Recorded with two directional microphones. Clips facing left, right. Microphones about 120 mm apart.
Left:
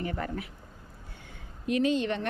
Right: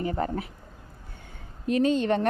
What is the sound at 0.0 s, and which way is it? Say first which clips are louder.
Speech: right 5 dB; 30° right (ahead or behind).